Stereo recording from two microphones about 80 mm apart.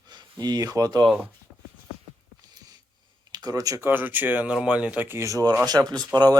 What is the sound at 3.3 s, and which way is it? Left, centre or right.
Speech, right.